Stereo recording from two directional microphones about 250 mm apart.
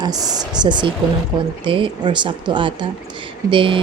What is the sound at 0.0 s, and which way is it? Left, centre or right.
A woman's voice, centre.